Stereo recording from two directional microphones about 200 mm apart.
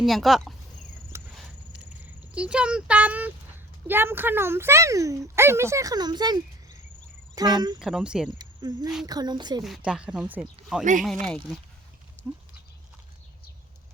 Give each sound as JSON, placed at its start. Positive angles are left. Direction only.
{"t": 0.0, "sound": "speech", "side_deg": 0}
{"t": 1.1, "sound": "a sound", "side_deg": -15}
{"t": 2.0, "sound": "a woman's voice", "side_deg": -5}
{"t": 7.8, "sound": "speech", "side_deg": -5}
{"t": 8.4, "sound": "a woman's voice", "side_deg": -20}
{"t": 9.6, "sound": "speech", "side_deg": -5}
{"t": 12.2, "sound": "goat", "side_deg": -35}